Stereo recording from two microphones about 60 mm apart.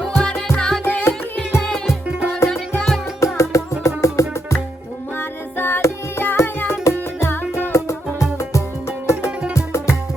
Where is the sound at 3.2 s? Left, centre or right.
Left.